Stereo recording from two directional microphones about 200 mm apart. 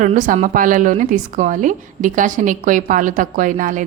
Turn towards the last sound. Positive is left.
turn(degrees=-40)  # may be behind; listen again after turning